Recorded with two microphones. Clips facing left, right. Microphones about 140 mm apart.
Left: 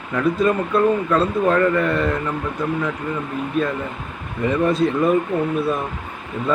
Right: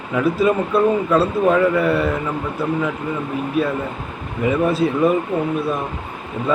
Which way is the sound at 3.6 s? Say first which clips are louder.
Right 1 dB; 5° right (ahead or behind).